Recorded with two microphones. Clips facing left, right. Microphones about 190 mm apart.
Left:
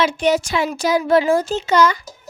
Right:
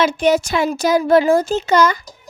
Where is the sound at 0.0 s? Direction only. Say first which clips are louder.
Right 2 dB; 45° right (ahead or behind).